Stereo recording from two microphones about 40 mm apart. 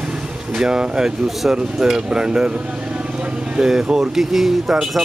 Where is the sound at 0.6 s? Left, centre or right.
Right.